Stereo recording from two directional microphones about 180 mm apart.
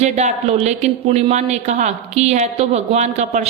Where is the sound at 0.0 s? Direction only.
40° right (ahead or behind).